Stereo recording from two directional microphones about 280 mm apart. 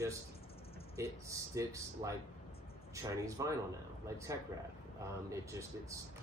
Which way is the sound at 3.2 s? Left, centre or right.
Centre.